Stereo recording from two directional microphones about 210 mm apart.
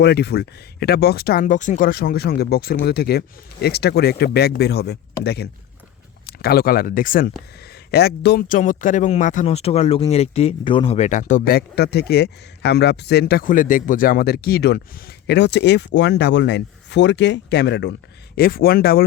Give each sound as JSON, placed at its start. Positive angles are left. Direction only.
{"t": 0.0, "sound": "speech", "side_deg": 50}
{"t": 8.6, "sound": "speech", "side_deg": 40}